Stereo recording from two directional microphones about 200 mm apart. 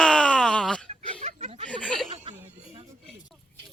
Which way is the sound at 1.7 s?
5° left (ahead or behind).